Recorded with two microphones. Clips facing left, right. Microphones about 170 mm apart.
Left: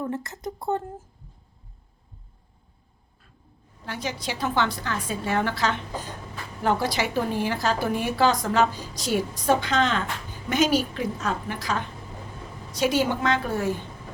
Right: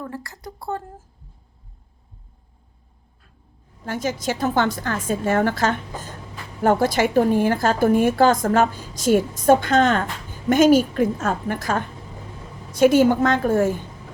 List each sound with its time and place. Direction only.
0.0 s speech: 20° left (ahead or behind)
3.8 s a woman's voice: 45° right (ahead or behind)